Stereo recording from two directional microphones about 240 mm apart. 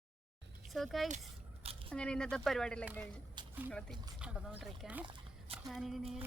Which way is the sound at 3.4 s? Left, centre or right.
Centre.